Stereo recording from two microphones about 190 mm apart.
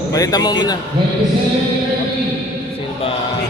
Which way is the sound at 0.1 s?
20° left (ahead or behind).